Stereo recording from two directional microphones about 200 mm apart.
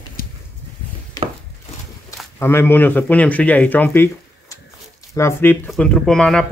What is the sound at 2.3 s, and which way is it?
Speech, 10° left (ahead or behind).